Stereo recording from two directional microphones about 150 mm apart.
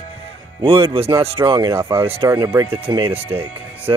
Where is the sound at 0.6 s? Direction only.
35° right (ahead or behind).